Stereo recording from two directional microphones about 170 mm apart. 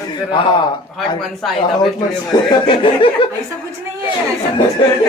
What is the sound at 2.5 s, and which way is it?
Speech, 30° left (ahead or behind).